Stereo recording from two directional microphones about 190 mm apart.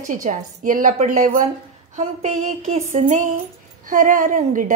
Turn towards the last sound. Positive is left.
turn(degrees=-45)  # may be behind; listen again after turning